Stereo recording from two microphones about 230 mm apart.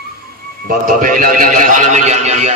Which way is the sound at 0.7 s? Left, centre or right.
Right.